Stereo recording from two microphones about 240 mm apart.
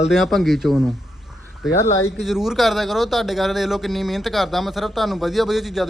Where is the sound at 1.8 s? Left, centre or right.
Centre.